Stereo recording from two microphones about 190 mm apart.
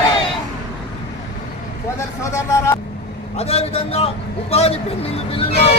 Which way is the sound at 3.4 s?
30° left (ahead or behind).